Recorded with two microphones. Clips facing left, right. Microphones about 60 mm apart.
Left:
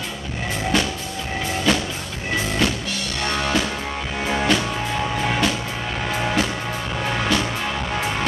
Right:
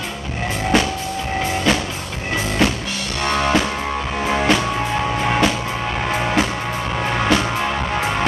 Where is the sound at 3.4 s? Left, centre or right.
Right.